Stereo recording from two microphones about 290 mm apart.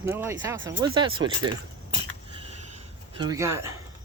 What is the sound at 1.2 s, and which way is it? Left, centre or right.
Speech, right.